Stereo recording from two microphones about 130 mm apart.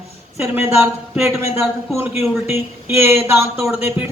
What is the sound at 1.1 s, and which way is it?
A man's voice, 15° right (ahead or behind).